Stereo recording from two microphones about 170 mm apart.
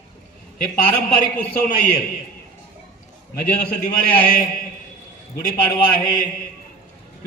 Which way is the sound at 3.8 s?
55° left (ahead or behind).